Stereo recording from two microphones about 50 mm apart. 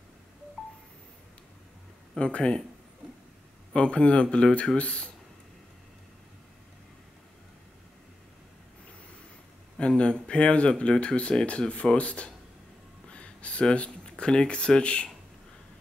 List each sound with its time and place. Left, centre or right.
0.6 s a sound: centre
2.1 s speech: left
3.7 s speech: left
9.8 s speech: left